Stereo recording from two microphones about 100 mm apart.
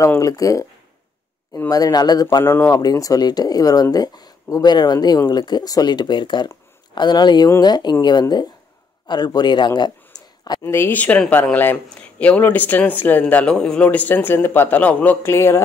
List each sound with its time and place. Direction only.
0.2 s speech: 35° left (ahead or behind)
1.7 s speech: 40° left (ahead or behind)
2.4 s speech: 25° left (ahead or behind)
2.8 s speech: 35° left (ahead or behind)
10.1 s a sound: 35° left (ahead or behind)
10.6 s speech: 25° left (ahead or behind)